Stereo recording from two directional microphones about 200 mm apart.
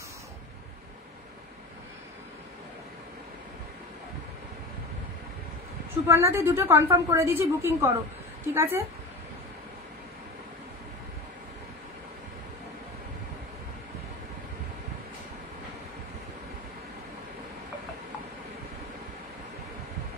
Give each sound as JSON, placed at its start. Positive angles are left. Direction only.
{"t": 6.0, "sound": "a woman's voice", "side_deg": -15}